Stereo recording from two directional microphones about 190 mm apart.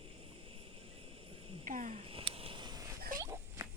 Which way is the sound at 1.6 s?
45° right (ahead or behind).